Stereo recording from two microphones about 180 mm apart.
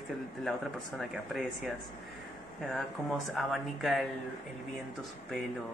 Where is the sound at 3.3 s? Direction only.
Centre (ahead or behind).